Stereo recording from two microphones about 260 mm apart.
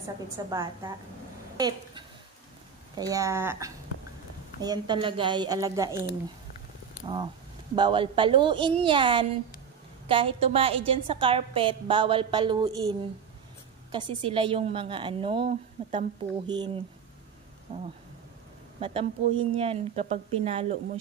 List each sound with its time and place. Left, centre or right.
0.5 s a woman's voice: centre
7.7 s a woman's voice: centre
13.9 s a woman's voice: centre